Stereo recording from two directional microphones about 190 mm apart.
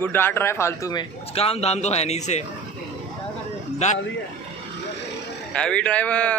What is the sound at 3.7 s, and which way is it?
Speech, 40° left (ahead or behind).